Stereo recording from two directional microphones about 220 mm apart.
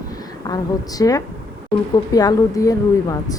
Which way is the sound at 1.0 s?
15° left (ahead or behind).